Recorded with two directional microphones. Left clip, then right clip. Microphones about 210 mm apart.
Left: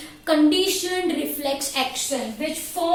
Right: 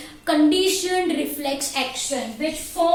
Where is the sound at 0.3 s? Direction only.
5° right (ahead or behind).